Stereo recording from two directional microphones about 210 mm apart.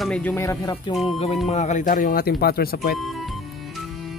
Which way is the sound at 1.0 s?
30° left (ahead or behind).